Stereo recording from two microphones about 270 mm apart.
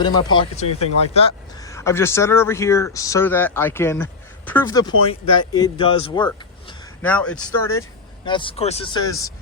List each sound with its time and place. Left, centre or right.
0.0 s speech: centre
7.0 s speech: centre